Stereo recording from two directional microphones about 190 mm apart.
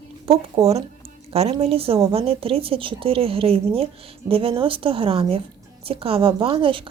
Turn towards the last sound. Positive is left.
turn(degrees=-25)  # may be behind; listen again after turning